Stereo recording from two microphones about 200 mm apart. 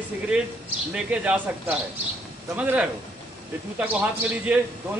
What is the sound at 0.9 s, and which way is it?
Speech, 5° right (ahead or behind).